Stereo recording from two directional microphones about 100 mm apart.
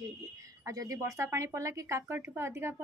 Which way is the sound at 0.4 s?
35° right (ahead or behind).